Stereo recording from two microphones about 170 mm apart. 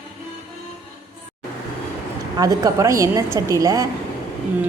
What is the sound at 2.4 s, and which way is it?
A woman's voice, 20° right (ahead or behind).